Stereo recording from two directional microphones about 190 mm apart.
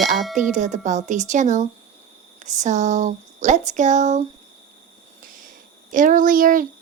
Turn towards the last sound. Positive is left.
turn(degrees=-45)  # may be behind; listen again after turning